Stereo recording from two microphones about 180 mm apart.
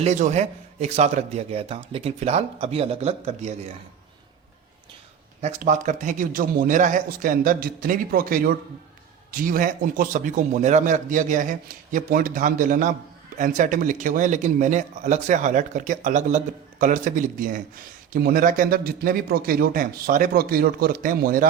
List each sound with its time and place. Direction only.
0.0 s a man's voice: 40° right (ahead or behind)
5.4 s a man's voice: 40° right (ahead or behind)